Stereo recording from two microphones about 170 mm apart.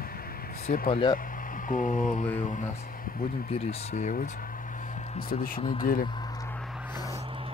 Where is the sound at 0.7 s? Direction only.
60° left (ahead or behind).